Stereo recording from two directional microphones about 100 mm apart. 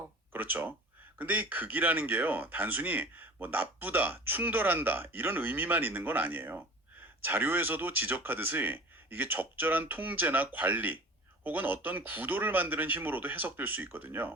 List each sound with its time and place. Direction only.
0.3 s speech: 20° right (ahead or behind)